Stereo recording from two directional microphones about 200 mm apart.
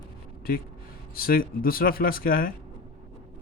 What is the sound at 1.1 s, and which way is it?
Speech, 45° left (ahead or behind).